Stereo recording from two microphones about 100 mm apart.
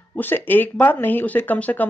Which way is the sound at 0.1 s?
20° left (ahead or behind).